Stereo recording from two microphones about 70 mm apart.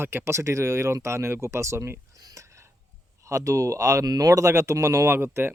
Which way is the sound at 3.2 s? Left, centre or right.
Right.